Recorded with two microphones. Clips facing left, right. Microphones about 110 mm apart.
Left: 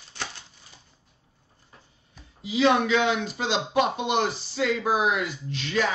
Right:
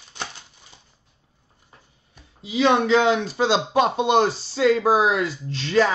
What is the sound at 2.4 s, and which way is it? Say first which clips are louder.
Speech: right 2 dB; 30° right (ahead or behind).